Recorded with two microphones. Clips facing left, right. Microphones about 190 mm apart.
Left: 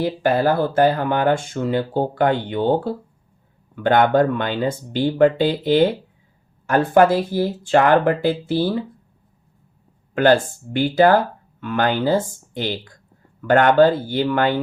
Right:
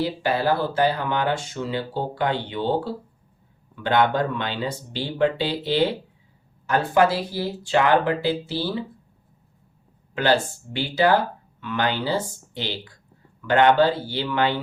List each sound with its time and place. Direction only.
0.0 s speech: 50° left (ahead or behind)
10.2 s speech: 50° left (ahead or behind)